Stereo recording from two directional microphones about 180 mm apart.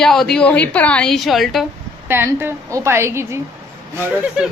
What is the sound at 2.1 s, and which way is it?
A woman's voice, 10° right (ahead or behind).